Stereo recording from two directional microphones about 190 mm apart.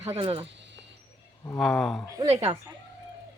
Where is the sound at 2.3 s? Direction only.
35° right (ahead or behind).